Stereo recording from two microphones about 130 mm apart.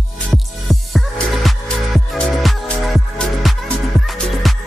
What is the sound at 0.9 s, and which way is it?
Music, centre (ahead or behind).